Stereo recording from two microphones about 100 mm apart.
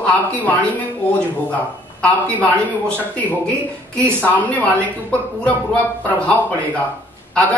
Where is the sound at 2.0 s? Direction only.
15° left (ahead or behind).